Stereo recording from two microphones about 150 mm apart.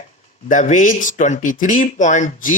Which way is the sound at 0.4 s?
55° left (ahead or behind).